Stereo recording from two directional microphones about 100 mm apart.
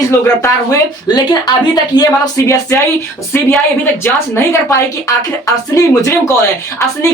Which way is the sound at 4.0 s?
25° left (ahead or behind).